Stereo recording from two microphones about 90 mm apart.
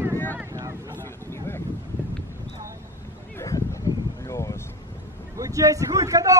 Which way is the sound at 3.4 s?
40° left (ahead or behind).